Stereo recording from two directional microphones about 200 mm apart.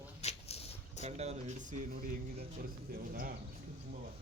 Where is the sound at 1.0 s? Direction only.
30° right (ahead or behind).